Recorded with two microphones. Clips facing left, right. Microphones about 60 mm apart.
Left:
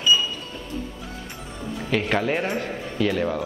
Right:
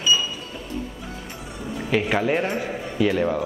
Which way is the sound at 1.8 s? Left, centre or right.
Centre.